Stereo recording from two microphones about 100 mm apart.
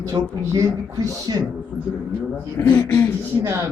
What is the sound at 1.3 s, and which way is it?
Speech, 50° right (ahead or behind).